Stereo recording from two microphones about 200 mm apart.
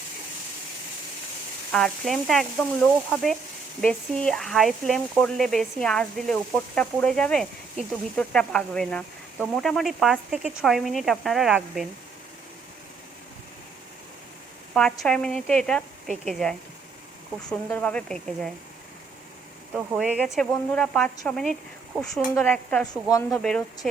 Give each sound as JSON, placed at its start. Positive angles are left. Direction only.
{"t": 1.7, "sound": "speech", "side_deg": 0}
{"t": 14.7, "sound": "speech", "side_deg": 5}
{"t": 19.7, "sound": "speech", "side_deg": -5}
{"t": 23.0, "sound": "speech", "side_deg": 15}
{"t": 23.4, "sound": "speech", "side_deg": 5}